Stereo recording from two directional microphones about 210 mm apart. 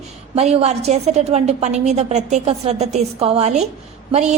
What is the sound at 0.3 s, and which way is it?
A woman's voice, 30° right (ahead or behind).